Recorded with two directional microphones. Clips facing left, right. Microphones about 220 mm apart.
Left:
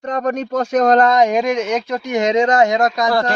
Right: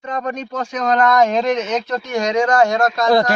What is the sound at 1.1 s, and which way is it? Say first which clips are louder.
Speech: left 1 dB; 15° left (ahead or behind).